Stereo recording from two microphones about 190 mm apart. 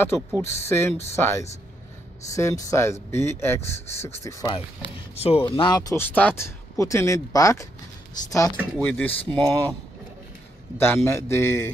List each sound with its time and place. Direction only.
0.5 s speech: 15° left (ahead or behind)
5.1 s speech: 30° left (ahead or behind); by 9.8 s 10° left (ahead or behind)
10.8 s speech: 15° left (ahead or behind)